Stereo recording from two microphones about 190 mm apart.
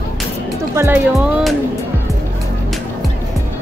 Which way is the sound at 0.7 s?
10° right (ahead or behind).